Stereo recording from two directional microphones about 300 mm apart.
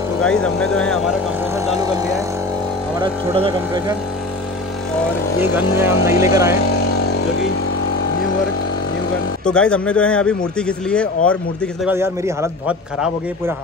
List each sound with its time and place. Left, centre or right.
0.2 s a man's voice: centre
3.0 s speech: centre
5.5 s speech: centre
9.5 s a man's voice: centre
11.8 s a man's voice: centre